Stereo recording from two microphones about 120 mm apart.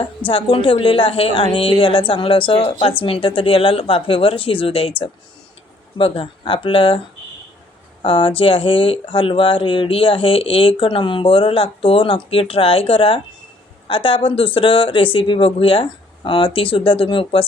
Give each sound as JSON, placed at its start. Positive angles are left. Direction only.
{"t": 0.3, "sound": "speech", "side_deg": 50}
{"t": 8.0, "sound": "speech", "side_deg": 45}